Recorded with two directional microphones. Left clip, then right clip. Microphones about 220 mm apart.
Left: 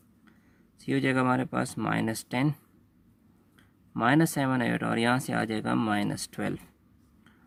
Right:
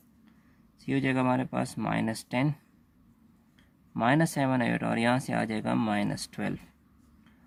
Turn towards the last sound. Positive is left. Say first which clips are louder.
# left 2 dB
turn(degrees=15)  # may be behind; listen again after turning